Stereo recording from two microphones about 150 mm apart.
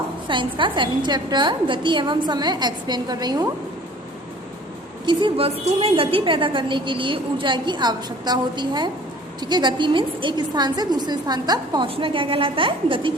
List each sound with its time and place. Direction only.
0.3 s a woman's voice: 35° right (ahead or behind)
5.0 s a woman's voice: 35° right (ahead or behind)